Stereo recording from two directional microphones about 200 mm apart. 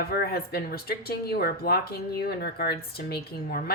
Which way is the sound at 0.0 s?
50° left (ahead or behind).